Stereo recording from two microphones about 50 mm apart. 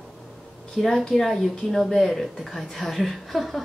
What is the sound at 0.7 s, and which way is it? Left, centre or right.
A woman's voice, centre.